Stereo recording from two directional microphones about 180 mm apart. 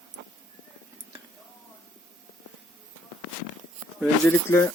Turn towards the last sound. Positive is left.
turn(degrees=10)  # may be behind; listen again after turning